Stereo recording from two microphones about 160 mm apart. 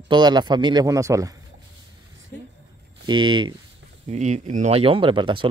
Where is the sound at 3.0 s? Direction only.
30° right (ahead or behind).